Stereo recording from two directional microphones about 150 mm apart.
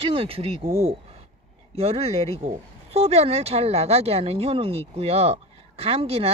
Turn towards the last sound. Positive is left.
turn(degrees=-40)  # may be behind; listen again after turning